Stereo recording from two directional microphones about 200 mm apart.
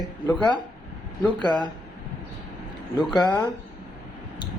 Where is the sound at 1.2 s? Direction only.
20° left (ahead or behind).